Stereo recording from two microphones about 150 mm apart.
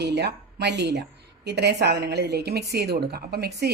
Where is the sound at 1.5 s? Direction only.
90° right.